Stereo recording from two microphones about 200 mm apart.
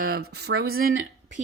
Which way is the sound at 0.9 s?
65° right (ahead or behind).